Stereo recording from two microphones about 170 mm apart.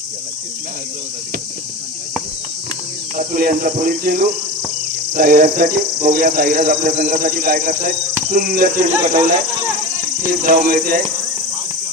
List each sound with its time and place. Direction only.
3.2 s cricket: 60° right (ahead or behind)
6.2 s a man's voice: 55° right (ahead or behind)
7.0 s a man's voice: 45° right (ahead or behind)
8.5 s a man's voice: 45° right (ahead or behind)
10.4 s a man's voice: 50° right (ahead or behind)